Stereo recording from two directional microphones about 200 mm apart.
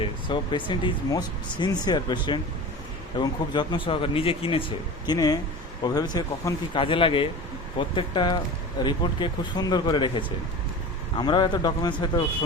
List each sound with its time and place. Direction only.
0.0 s speech: 25° left (ahead or behind)